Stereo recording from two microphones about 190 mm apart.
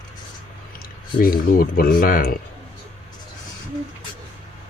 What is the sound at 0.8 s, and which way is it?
Speech, 50° left (ahead or behind).